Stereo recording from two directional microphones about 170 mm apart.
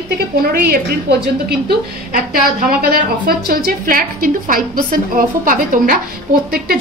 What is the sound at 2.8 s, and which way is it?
A woman's voice, 60° right (ahead or behind).